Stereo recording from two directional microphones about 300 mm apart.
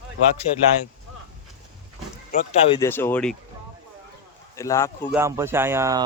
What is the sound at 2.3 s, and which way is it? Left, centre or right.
Speech, left.